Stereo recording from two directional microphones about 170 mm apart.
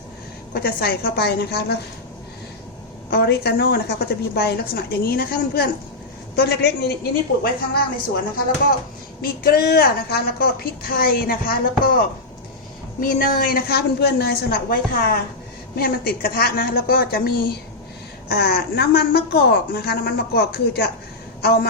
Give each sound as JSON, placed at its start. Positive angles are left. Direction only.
{"t": 0.5, "sound": "a woman's voice", "side_deg": 65}
{"t": 3.1, "sound": "a woman's voice", "side_deg": 65}
{"t": 9.4, "sound": "a woman's voice", "side_deg": 65}